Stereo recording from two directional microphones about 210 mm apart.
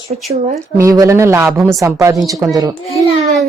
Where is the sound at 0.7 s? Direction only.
15° right (ahead or behind).